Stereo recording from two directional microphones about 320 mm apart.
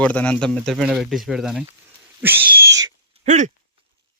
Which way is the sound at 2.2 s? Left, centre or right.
Centre.